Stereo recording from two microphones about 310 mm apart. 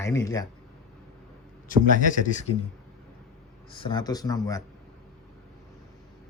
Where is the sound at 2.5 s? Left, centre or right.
Left.